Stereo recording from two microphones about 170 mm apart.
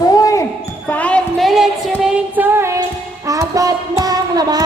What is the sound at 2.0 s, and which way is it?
Child singing, 10° right (ahead or behind).